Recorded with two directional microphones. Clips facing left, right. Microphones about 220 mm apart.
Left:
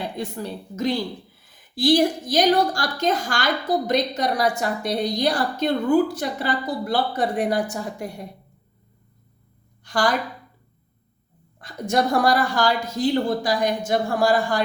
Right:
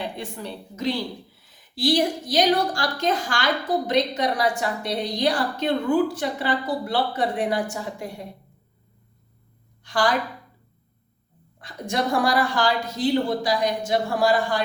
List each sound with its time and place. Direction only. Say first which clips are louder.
0.2 s a woman's voice: left 4 dB; 40° left (ahead or behind)
9.8 s a woman's voice: left 1 dB; 45° left (ahead or behind)
11.6 s a woman's voice: left 4 dB; 45° left (ahead or behind)